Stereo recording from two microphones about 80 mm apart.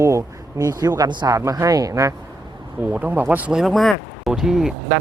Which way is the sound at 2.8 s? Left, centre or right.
Centre.